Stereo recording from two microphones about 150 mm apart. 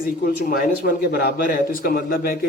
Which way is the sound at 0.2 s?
85° left.